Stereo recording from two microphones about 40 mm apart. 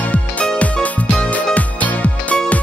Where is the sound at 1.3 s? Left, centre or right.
Left.